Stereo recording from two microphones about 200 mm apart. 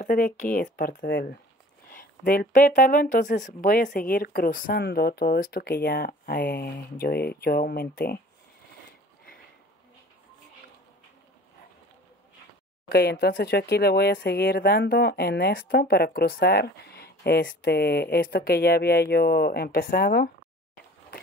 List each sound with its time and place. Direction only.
0.0 s speech: 40° left (ahead or behind)
12.8 s speech: 50° left (ahead or behind)